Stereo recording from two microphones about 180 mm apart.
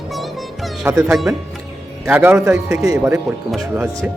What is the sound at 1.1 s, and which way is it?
Speech, centre (ahead or behind).